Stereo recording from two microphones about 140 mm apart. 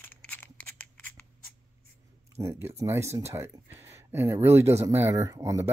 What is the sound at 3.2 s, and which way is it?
Speech, 20° right (ahead or behind).